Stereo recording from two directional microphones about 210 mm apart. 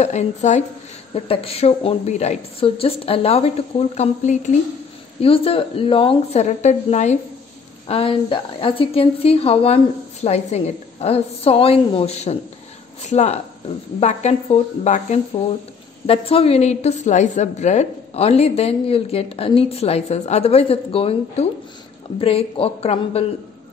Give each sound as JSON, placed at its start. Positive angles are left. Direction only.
{"t": 0.0, "sound": "a woman's voice", "side_deg": 30}